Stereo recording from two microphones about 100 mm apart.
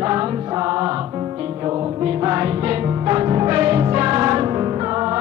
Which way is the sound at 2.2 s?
30° right (ahead or behind).